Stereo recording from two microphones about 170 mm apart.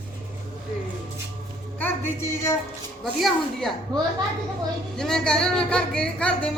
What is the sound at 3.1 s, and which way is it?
Speech, centre (ahead or behind).